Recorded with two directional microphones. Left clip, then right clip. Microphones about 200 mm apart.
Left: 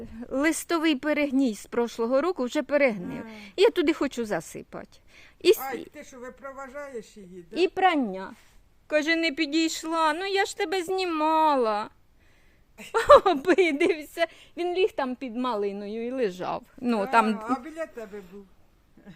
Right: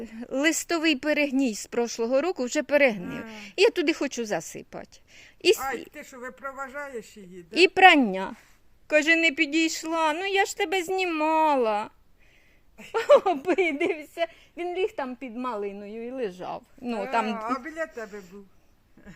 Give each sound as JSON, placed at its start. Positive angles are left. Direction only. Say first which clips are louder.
{"t": 0.0, "sound": "a man's voice", "louder": "right 2 dB", "side_deg": -10}
{"t": 0.3, "sound": "speech", "louder": "right 1 dB", "side_deg": 5}
{"t": 5.9, "sound": "a man's voice", "louder": "right 2 dB", "side_deg": -5}
{"t": 8.9, "sound": "speech", "louder": "right 4 dB", "side_deg": -5}
{"t": 12.7, "sound": "a woman's voice", "louder": "left 3 dB", "side_deg": 15}
{"t": 19.0, "sound": "a sound", "louder": "right 1 dB", "side_deg": 5}